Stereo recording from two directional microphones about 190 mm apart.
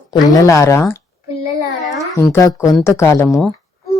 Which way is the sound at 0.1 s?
20° left (ahead or behind).